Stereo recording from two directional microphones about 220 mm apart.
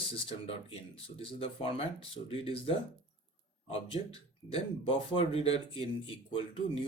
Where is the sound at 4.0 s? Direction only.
30° left (ahead or behind).